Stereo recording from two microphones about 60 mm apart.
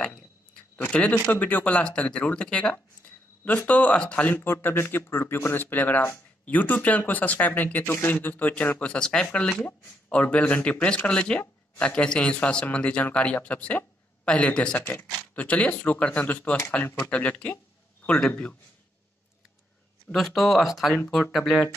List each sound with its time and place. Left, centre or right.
0.9 s speech: left
4.3 s speech: left
7.8 s speech: left
8.1 s speech: left; by 9.7 s centre
9.7 s a man's voice: left
20.1 s speech: centre